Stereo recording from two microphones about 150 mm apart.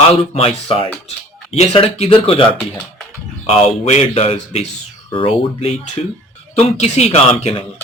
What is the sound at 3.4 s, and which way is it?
Speech, 40° left (ahead or behind).